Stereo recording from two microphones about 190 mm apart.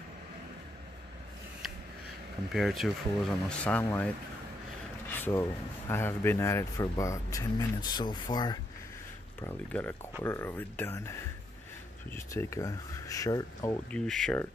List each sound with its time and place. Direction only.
1.6 s a sound: centre (ahead or behind)
2.5 s speech: centre (ahead or behind)
5.1 s speech: 10° left (ahead or behind)
9.4 s speech: 10° left (ahead or behind)
13.8 s speech: 5° left (ahead or behind)